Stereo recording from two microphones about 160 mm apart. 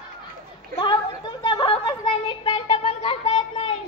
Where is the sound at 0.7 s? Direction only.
25° left (ahead or behind).